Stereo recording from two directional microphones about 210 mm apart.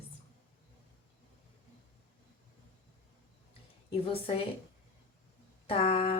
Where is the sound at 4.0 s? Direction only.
25° left (ahead or behind).